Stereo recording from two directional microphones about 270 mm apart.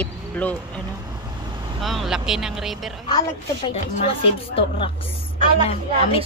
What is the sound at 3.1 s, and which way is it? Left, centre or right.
A woman's voice, centre.